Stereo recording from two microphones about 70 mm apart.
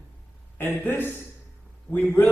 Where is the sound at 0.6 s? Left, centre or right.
Left.